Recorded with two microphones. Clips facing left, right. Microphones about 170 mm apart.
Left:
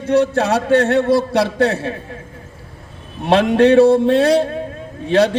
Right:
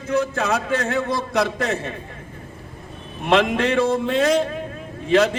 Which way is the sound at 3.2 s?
35° left (ahead or behind).